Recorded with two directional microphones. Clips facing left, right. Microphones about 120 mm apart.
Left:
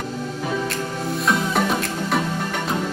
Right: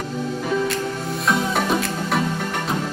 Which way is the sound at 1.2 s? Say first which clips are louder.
Even; centre (ahead or behind).